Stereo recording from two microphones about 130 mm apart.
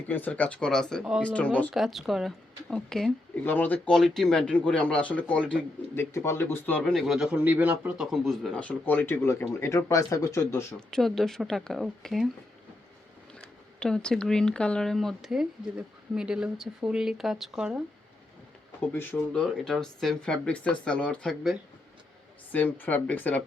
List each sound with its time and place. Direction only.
0.1 s speech: 10° left (ahead or behind)
1.7 s a man's voice: centre (ahead or behind)
3.4 s speech: 15° left (ahead or behind)
6.8 s a man's voice: centre (ahead or behind); by 10.8 s 20° left (ahead or behind)
10.8 s a man's voice: 5° left (ahead or behind)
13.4 s a man's voice: 5° left (ahead or behind)
18.9 s speech: 15° left (ahead or behind)
19.4 s a man's voice: 5° left (ahead or behind)
22.5 s speech: 15° left (ahead or behind)